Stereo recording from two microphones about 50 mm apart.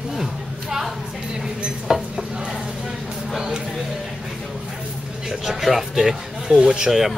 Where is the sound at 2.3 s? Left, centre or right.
Centre.